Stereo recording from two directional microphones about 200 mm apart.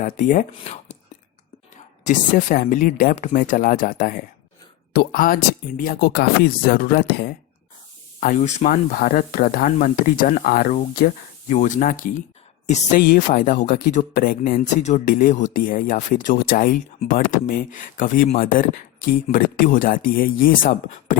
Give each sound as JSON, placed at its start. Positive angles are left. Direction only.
{"t": 0.0, "sound": "speech", "side_deg": 40}
{"t": 8.2, "sound": "speech", "side_deg": 40}